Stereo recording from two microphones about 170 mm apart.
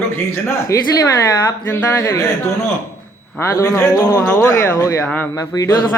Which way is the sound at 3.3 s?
15° left (ahead or behind).